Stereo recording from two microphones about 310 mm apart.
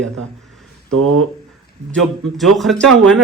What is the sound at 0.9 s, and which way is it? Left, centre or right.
Speech, right.